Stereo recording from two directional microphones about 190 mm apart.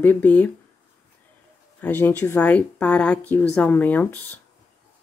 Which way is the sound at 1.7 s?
10° left (ahead or behind).